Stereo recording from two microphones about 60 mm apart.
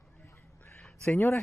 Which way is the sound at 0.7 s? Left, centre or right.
Centre.